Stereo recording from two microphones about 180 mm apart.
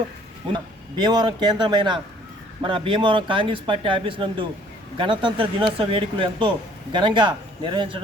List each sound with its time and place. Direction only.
0.4 s speech: 25° right (ahead or behind)